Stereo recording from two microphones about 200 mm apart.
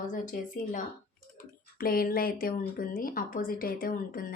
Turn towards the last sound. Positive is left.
turn(degrees=45)  # may be behind; listen again after turning